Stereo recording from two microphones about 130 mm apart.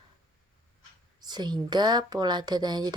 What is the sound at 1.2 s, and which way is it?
Speech, 35° right (ahead or behind).